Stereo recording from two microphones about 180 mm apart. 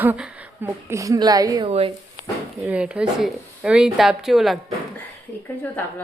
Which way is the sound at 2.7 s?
5° right (ahead or behind).